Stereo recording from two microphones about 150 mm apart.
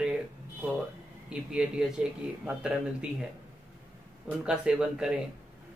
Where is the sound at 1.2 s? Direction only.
5° right (ahead or behind).